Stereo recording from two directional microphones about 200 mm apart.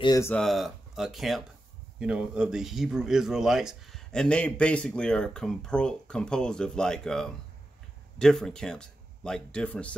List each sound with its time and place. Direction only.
0.0 s speech: 20° left (ahead or behind)
0.3 s speech: centre (ahead or behind)